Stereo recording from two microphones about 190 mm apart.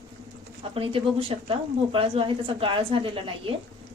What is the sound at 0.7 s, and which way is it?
A woman's voice, 30° right (ahead or behind).